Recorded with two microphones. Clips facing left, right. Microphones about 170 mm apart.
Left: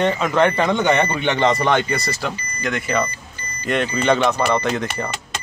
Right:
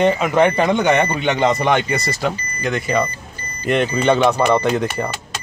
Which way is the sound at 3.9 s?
10° right (ahead or behind).